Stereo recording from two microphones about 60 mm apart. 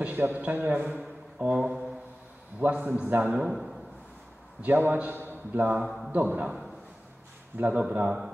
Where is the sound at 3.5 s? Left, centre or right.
Centre.